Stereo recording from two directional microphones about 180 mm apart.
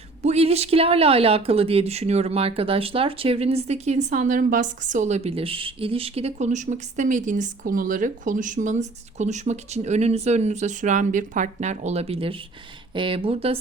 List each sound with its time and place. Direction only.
0.2 s speech: 35° right (ahead or behind)